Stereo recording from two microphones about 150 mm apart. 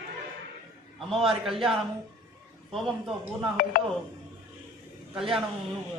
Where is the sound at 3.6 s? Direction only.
70° left (ahead or behind).